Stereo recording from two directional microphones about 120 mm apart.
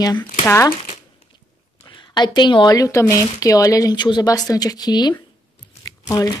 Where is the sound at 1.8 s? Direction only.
40° left (ahead or behind).